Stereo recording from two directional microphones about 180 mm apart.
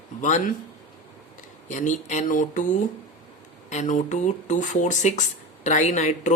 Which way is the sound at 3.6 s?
40° left (ahead or behind).